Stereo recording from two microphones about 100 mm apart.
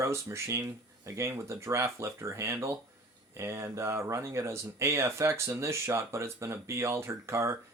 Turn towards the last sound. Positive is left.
turn(degrees=-30)  # may be behind; listen again after turning